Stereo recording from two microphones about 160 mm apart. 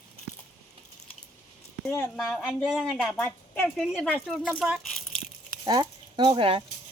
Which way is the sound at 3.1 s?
15° left (ahead or behind).